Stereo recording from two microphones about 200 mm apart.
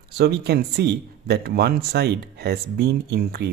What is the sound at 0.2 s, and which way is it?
Speech, 55° right (ahead or behind).